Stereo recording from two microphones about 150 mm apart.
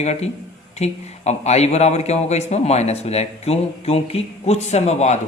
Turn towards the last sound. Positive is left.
turn(degrees=45)  # may be behind; listen again after turning